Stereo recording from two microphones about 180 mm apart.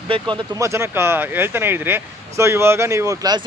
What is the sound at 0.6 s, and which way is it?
Speech, 15° right (ahead or behind).